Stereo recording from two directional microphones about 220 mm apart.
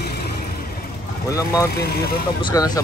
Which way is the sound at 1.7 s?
45° left (ahead or behind).